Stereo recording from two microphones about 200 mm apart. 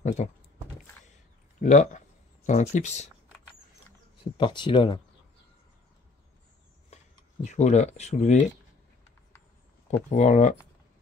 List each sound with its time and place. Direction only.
0.2 s speech: 35° left (ahead or behind)
1.6 s speech: 40° left (ahead or behind)
4.2 s speech: 25° left (ahead or behind)
6.9 s a sound: 35° left (ahead or behind)
7.4 s speech: 35° left (ahead or behind)
9.8 s speech: 35° left (ahead or behind)